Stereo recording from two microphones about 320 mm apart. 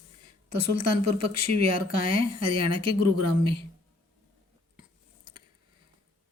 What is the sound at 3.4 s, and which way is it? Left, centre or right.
Speech, centre.